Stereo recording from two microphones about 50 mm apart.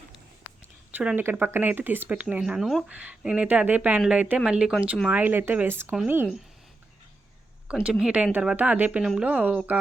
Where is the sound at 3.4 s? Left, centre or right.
Right.